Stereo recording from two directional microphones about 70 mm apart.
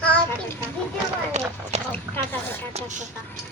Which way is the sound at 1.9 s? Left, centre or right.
Left.